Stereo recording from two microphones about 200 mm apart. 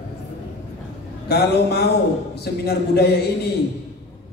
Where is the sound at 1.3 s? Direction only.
50° left (ahead or behind).